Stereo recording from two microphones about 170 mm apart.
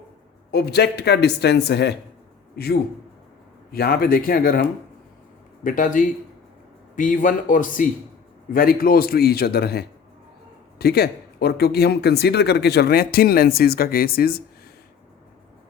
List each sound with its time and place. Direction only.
0.5 s speech: 70° left (ahead or behind)